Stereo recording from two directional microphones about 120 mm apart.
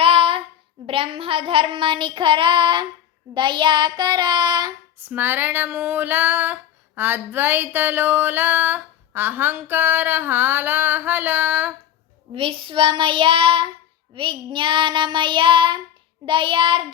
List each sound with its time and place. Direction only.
0.0 s child singing: 50° right (ahead or behind)
5.0 s female singing: 15° right (ahead or behind)
12.3 s child singing: 45° right (ahead or behind)